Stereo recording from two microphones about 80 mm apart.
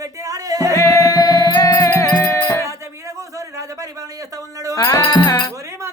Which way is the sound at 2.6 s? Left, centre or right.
Right.